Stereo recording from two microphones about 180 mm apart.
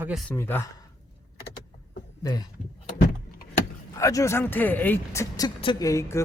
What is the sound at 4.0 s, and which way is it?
A man's voice, 15° left (ahead or behind).